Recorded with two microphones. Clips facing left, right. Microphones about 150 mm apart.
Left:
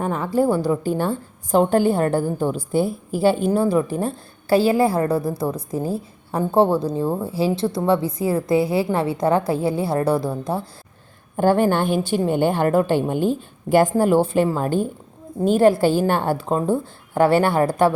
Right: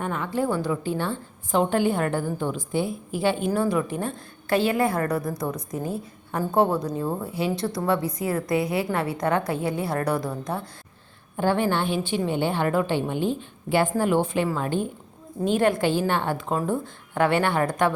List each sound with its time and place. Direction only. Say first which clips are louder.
0.0 s a woman's voice: left 6 dB; 35° left (ahead or behind)
11.3 s a woman's voice: left 6 dB; 45° left (ahead or behind)